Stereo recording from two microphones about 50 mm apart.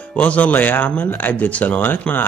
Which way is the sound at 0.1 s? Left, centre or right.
Left.